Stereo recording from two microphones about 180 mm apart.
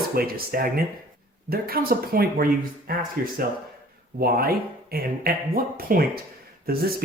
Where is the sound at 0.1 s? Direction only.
55° right (ahead or behind).